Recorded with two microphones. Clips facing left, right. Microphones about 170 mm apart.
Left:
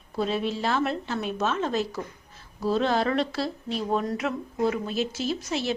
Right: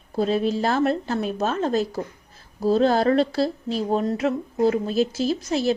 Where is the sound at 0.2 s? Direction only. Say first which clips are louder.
Right 5 dB; 40° right (ahead or behind).